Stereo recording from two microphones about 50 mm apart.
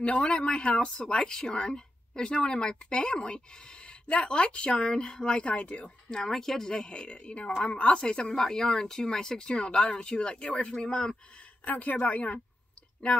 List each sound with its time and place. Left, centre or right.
0.2 s speech: centre
6.0 s speech: centre
8.3 s speech: centre
11.6 s a man's voice: left